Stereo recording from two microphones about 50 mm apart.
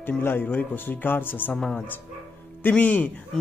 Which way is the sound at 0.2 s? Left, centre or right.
Left.